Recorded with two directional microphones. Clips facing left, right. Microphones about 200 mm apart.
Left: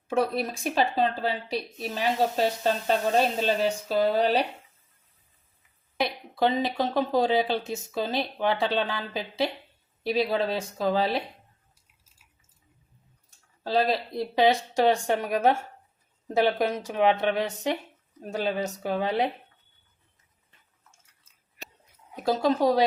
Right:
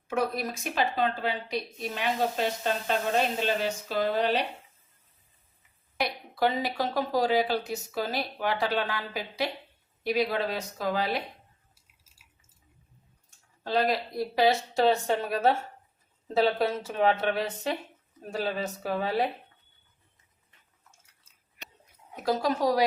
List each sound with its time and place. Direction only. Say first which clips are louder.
0.1 s speech: left 3 dB; 30° left (ahead or behind)
6.1 s speech: left 2 dB; 20° left (ahead or behind)
13.7 s a woman's voice: left 2 dB; 30° left (ahead or behind)
22.1 s speech: left 3 dB; 25° left (ahead or behind)